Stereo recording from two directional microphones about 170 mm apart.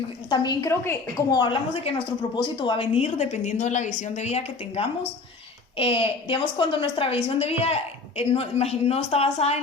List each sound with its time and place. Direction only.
0.3 s a woman's voice: 25° left (ahead or behind)